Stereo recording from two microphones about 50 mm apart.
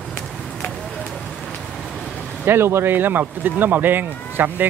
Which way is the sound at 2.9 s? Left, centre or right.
Right.